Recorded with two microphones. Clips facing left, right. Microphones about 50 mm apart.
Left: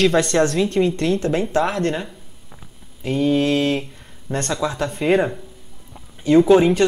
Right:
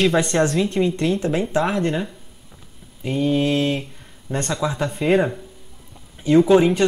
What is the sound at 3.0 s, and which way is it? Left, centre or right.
Speech, centre.